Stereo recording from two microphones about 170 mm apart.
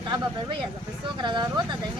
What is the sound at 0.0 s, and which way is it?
A woman's voice, 25° right (ahead or behind).